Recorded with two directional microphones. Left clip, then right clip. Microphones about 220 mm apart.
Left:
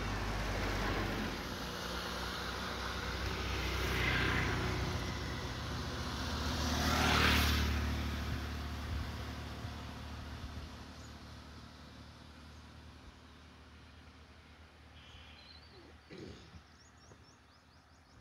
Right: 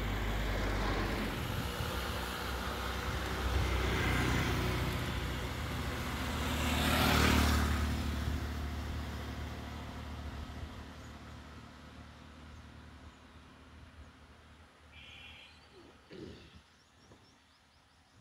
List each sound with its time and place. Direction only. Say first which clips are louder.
0.0 s vehicle: right 1 dB; 30° left (ahead or behind)
1.7 s vehicle: right 2 dB; 15° right (ahead or behind)
3.2 s vehicle: right 2 dB; 30° right (ahead or behind)
4.8 s vehicle: right 2 dB; 25° right (ahead or behind)
7.1 s vehicle: even; 40° right (ahead or behind); by 8.5 s 15° right (ahead or behind)
8.5 s vehicle: right 1 dB; 5° right (ahead or behind)